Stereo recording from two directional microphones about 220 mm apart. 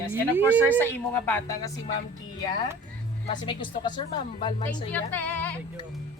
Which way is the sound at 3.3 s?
20° left (ahead or behind).